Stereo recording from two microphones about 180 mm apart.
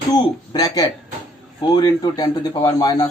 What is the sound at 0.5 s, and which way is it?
Speech, 20° left (ahead or behind).